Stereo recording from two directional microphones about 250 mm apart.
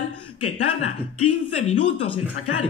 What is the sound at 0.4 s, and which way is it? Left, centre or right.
Speech, left.